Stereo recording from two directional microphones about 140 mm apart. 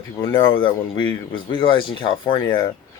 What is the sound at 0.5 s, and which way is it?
Speech, 35° left (ahead or behind).